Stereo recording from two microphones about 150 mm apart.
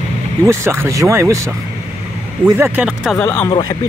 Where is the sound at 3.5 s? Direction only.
25° left (ahead or behind).